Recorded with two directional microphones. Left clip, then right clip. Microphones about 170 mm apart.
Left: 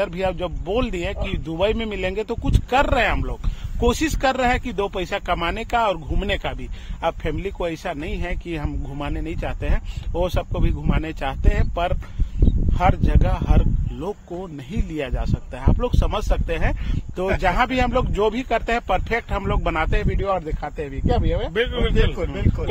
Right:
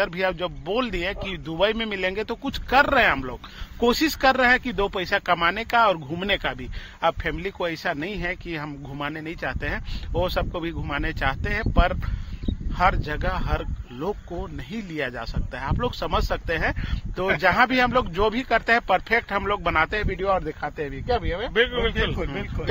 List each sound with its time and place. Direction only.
0.0 s speech: 5° right (ahead or behind)
14.7 s speech: centre (ahead or behind)
21.5 s speech: 20° left (ahead or behind)
22.1 s speech: 70° left (ahead or behind)